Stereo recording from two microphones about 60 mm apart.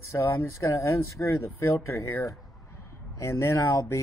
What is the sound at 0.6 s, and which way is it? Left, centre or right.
A man's voice, left.